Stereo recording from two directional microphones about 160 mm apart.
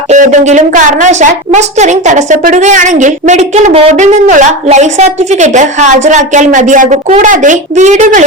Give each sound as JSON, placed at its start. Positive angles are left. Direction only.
{"t": 0.1, "sound": "a woman's voice", "side_deg": -50}